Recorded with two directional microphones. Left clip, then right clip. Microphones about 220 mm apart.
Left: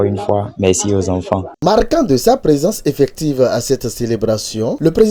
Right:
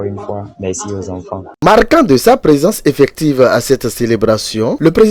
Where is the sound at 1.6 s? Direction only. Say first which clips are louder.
Right 6 dB; centre (ahead or behind).